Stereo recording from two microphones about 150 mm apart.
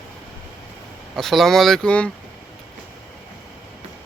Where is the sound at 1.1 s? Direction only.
Centre (ahead or behind).